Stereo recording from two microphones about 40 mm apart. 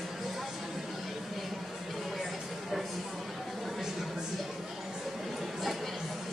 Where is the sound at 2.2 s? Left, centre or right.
Centre.